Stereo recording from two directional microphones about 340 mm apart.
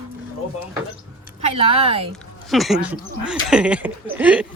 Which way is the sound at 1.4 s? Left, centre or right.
Centre.